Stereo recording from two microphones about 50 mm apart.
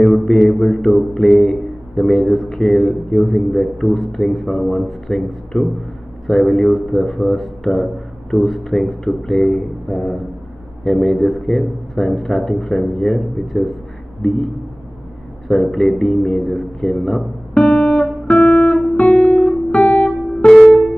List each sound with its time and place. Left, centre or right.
0.0 s mantra: centre
2.0 s a sound: centre
2.6 s a man's voice: centre
15.4 s speech: centre
17.6 s music: left
18.2 s guitar: left
20.4 s music: left